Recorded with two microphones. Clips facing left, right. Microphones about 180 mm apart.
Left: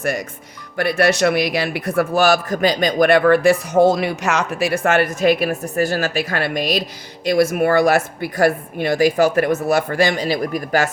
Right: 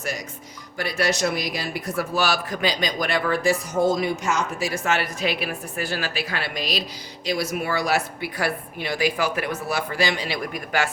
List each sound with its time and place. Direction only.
0.0 s a man's voice: 55° left (ahead or behind); by 10.9 s 40° left (ahead or behind)